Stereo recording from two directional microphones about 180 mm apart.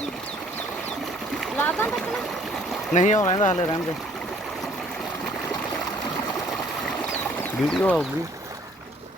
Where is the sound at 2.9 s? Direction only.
40° left (ahead or behind).